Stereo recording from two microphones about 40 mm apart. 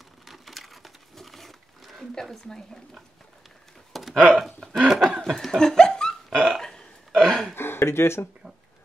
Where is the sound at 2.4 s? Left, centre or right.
Centre.